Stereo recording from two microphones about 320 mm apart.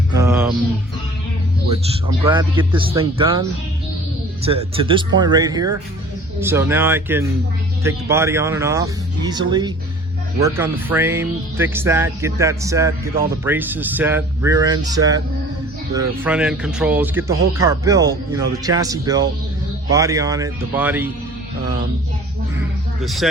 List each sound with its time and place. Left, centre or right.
0.2 s music: centre
2.0 s speech: centre
4.4 s speech: centre
23.0 s speech: centre